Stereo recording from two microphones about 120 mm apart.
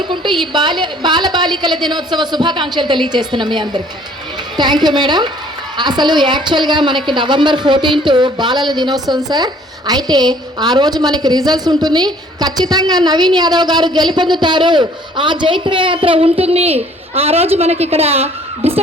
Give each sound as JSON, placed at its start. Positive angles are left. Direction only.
{"t": 0.1, "sound": "a woman's voice", "side_deg": -40}